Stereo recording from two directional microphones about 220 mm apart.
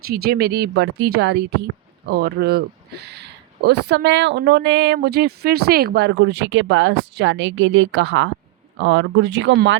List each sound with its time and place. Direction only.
0.0 s speech: 45° right (ahead or behind)